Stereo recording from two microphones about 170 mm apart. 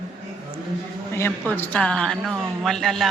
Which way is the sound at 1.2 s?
10° left (ahead or behind).